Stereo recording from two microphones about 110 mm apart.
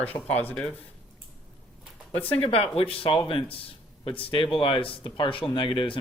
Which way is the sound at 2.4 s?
60° left (ahead or behind).